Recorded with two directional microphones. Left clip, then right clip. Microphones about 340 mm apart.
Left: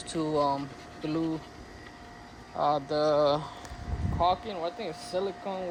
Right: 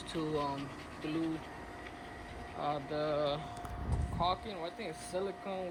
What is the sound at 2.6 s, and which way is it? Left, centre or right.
Speech, centre.